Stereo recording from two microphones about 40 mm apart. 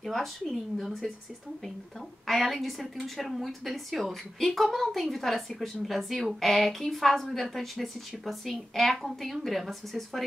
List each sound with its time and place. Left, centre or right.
0.0 s a woman's voice: centre